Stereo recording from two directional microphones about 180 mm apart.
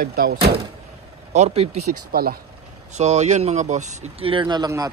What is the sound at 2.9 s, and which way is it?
Speech, 40° right (ahead or behind).